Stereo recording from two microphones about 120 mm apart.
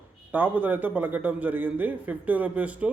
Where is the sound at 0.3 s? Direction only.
15° right (ahead or behind).